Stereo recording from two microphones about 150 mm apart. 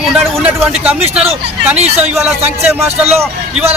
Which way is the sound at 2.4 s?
45° right (ahead or behind).